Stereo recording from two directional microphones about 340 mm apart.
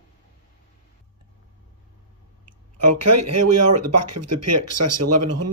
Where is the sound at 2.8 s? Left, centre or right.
Right.